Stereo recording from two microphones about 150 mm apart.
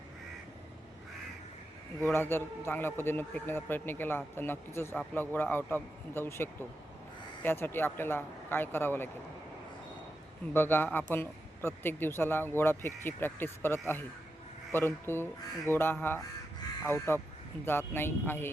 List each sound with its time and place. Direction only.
2.1 s speech: 15° left (ahead or behind)
10.5 s speech: 15° left (ahead or behind)